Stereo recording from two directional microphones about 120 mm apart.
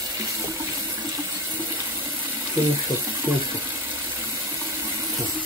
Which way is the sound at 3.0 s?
30° right (ahead or behind).